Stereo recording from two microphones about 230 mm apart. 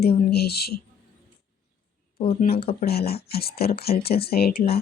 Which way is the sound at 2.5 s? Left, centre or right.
Left.